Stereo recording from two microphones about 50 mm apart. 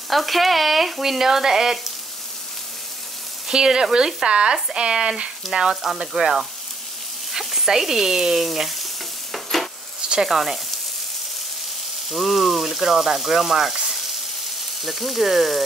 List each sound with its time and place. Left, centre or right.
0.1 s frying: centre
3.4 s speech: centre
8.5 s frying: centre
9.3 s stir: centre
10.2 s frying: centre
12.1 s frying: centre
14.8 s frying: centre